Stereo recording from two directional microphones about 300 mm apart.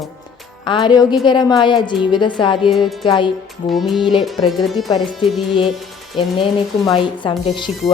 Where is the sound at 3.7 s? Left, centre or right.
Centre.